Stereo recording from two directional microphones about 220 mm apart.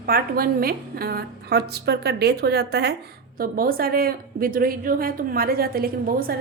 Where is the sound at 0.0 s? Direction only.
40° right (ahead or behind).